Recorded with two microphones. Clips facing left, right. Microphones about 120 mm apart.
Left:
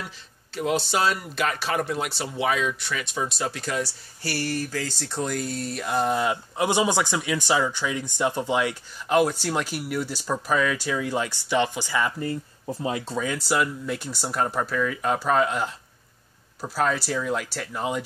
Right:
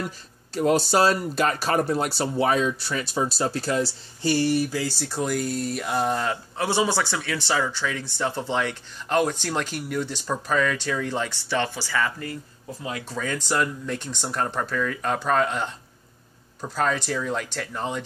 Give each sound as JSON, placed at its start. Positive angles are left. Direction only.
{"t": 0.6, "sound": "speech", "side_deg": -40}
{"t": 4.2, "sound": "speech", "side_deg": -20}
{"t": 6.2, "sound": "speech", "side_deg": 15}
{"t": 13.2, "sound": "speech", "side_deg": 10}